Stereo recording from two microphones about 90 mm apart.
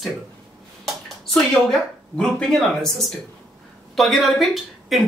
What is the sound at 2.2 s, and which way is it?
Speech, 5° left (ahead or behind).